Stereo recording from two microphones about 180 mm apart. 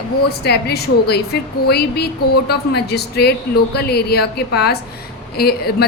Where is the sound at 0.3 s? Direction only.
60° left (ahead or behind).